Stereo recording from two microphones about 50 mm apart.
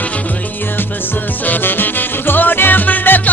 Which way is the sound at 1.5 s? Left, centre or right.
Left.